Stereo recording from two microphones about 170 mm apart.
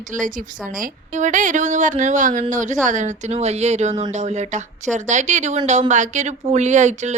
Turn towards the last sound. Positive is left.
turn(degrees=-45)  # may be behind; listen again after turning